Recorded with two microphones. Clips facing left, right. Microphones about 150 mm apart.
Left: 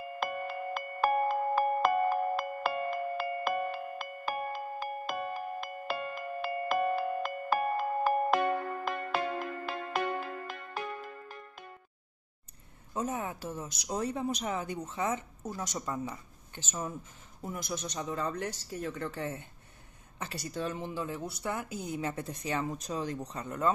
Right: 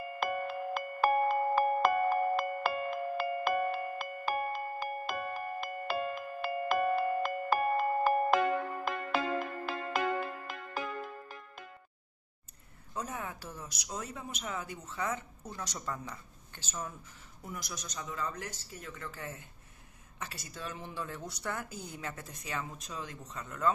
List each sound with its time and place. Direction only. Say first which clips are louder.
0.2 s music: right 1 dB; centre (ahead or behind)
12.9 s a woman's voice: left 5 dB; 20° left (ahead or behind)
20.7 s a woman's voice: left 5 dB; 20° left (ahead or behind)